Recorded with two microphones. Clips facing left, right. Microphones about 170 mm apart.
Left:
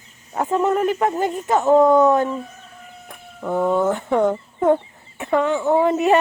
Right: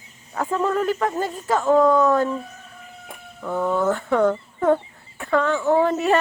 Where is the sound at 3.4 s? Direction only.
20° left (ahead or behind).